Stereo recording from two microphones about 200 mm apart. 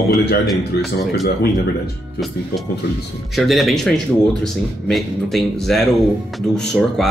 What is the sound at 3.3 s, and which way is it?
Speech, centre (ahead or behind).